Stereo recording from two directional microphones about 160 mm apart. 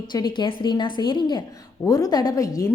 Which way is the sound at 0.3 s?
30° left (ahead or behind).